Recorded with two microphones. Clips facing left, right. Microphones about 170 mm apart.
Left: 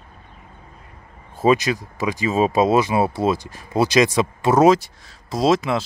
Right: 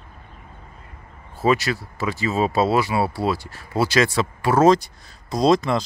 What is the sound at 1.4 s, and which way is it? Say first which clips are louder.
Speech: left 3 dB; 20° left (ahead or behind).